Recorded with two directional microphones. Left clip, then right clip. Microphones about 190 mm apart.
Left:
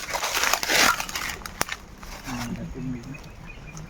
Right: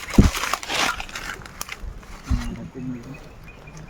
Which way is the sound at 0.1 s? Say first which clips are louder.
Right 1 dB; 10° left (ahead or behind).